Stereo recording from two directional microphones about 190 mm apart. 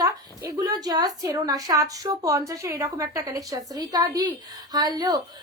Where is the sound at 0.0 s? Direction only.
20° right (ahead or behind).